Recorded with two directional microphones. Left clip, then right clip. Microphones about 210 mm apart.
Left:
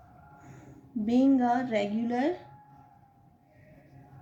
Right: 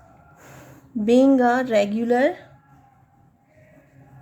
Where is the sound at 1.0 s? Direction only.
45° right (ahead or behind).